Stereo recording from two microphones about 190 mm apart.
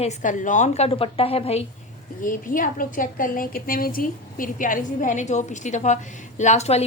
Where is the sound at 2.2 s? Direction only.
45° left (ahead or behind).